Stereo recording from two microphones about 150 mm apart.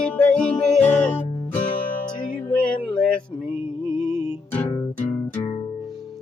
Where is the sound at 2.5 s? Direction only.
5° left (ahead or behind).